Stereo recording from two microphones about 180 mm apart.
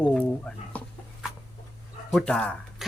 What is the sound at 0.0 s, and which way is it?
Bird, 5° left (ahead or behind).